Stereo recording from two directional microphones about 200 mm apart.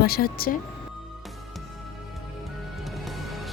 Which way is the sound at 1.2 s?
Centre (ahead or behind).